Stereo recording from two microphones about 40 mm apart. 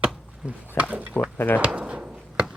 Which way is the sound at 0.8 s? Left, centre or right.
Right.